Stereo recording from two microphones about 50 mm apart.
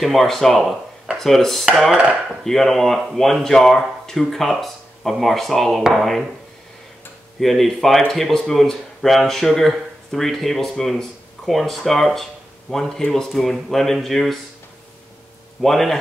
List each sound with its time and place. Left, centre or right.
0.0 s speech: centre
7.3 s speech: centre
15.6 s speech: centre